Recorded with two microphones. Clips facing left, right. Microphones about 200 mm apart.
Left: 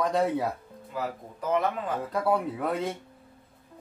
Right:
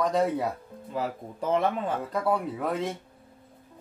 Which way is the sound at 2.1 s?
Centre (ahead or behind).